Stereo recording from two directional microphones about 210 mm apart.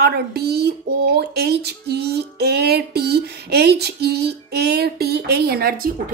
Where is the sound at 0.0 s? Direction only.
50° right (ahead or behind).